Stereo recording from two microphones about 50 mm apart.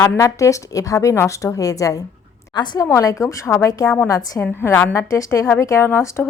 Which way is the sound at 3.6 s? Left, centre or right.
Left.